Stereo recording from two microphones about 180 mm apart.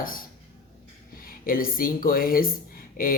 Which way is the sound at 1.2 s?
55° left (ahead or behind).